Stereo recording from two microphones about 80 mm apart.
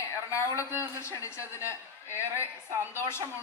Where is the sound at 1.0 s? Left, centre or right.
Left.